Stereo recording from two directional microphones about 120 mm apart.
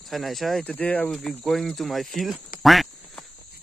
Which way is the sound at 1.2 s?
Centre (ahead or behind).